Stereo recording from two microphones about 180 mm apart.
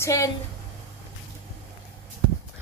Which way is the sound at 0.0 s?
15° left (ahead or behind).